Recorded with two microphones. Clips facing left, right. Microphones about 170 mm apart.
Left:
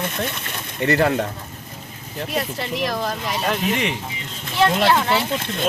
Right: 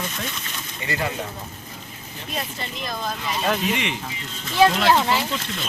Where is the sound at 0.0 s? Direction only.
60° left (ahead or behind).